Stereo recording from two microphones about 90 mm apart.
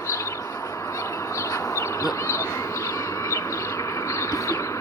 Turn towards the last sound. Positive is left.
turn(degrees=35)  # may be behind; listen again after turning